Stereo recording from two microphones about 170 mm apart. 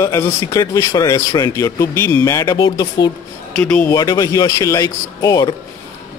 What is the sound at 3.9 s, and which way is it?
Speech, 20° left (ahead or behind).